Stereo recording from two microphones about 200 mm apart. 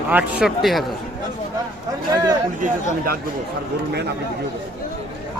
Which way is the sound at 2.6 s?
45° right (ahead or behind).